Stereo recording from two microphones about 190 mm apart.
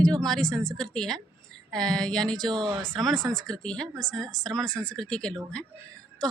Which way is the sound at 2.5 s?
25° right (ahead or behind).